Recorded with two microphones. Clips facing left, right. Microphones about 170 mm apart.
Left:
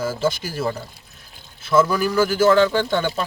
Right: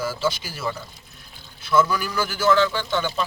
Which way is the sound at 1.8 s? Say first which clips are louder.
Left 4 dB; 35° left (ahead or behind).